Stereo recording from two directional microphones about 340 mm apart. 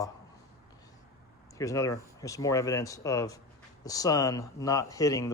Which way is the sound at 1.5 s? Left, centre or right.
Centre.